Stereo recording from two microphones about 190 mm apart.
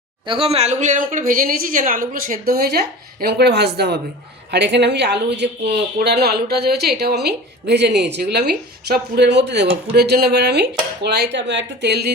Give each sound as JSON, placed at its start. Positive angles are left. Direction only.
{"t": 0.3, "sound": "speech", "side_deg": -30}